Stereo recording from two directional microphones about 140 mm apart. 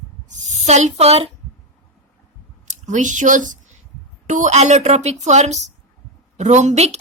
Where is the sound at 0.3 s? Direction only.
55° right (ahead or behind).